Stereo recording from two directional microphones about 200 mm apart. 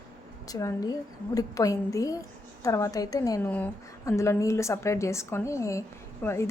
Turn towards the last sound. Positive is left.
turn(degrees=15)  # may be behind; listen again after turning